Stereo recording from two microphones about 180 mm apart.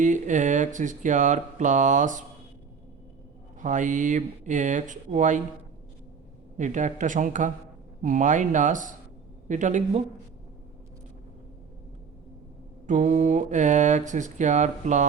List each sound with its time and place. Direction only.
0.0 s speech: 45° right (ahead or behind)
3.6 s speech: 45° right (ahead or behind)
6.6 s speech: 45° right (ahead or behind)
12.9 s speech: 40° right (ahead or behind)